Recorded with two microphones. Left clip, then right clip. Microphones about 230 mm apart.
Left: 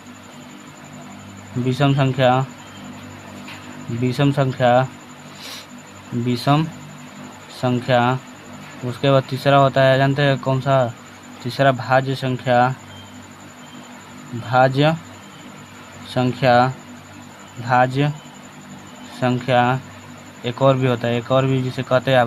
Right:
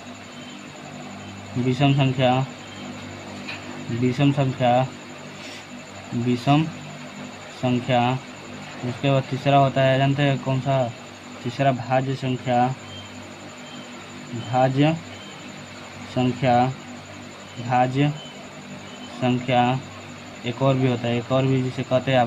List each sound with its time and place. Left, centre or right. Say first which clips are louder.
1.7 s speech: left 3 dB; left
4.1 s speech: left 4 dB; left
6.3 s speech: left 2 dB; left
14.5 s speech: left 5 dB; left
16.1 s speech: left 5 dB; left
19.2 s speech: left 3 dB; left